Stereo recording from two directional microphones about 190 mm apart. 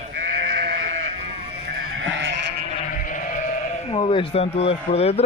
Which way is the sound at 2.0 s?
70° right (ahead or behind).